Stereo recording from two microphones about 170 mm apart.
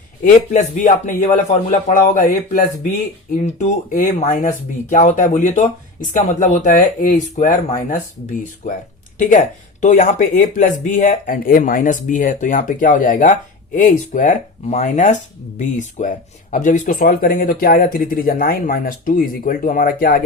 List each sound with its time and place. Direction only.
0.2 s speech: 45° left (ahead or behind)